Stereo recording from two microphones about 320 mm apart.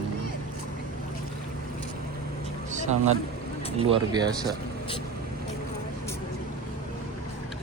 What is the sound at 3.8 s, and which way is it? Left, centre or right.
Speech, centre.